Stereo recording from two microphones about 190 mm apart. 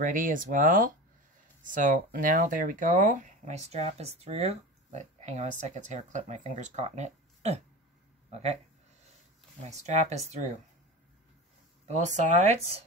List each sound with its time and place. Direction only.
0.0 s speech: 45° right (ahead or behind)
9.7 s speech: 35° right (ahead or behind)
11.9 s speech: 40° right (ahead or behind)